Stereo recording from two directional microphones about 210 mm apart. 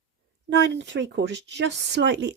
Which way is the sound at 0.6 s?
55° right (ahead or behind).